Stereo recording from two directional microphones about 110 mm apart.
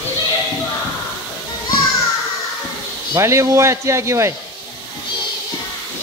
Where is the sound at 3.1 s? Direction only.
25° right (ahead or behind).